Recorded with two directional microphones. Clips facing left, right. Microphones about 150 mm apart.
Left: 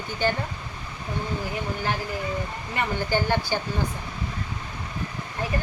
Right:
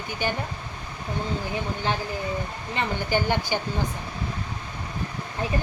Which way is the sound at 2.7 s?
15° right (ahead or behind).